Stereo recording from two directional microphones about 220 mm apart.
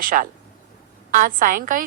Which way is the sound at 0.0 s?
40° right (ahead or behind).